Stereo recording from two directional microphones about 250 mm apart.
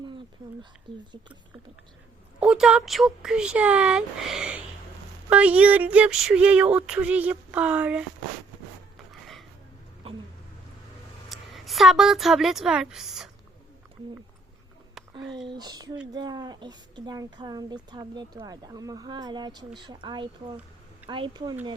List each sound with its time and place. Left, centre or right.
2.4 s speech: centre
10.0 s a sound: right
11.3 s a woman's voice: centre
15.4 s speech: centre